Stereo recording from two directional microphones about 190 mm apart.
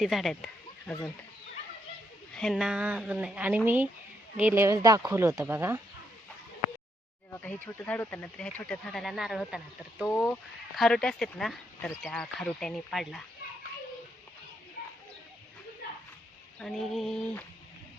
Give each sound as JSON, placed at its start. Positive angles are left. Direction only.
{"t": 0.0, "sound": "speech", "side_deg": 0}
{"t": 2.3, "sound": "speech", "side_deg": 0}
{"t": 7.3, "sound": "speech", "side_deg": 10}
{"t": 10.1, "sound": "speech", "side_deg": 10}
{"t": 14.8, "sound": "bird", "side_deg": 55}
{"t": 16.6, "sound": "speech", "side_deg": 0}